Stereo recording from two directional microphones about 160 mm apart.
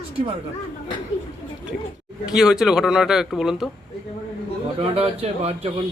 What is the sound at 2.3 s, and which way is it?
A man's voice, 5° right (ahead or behind).